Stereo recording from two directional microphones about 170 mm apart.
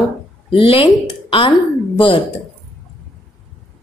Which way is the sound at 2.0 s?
30° left (ahead or behind).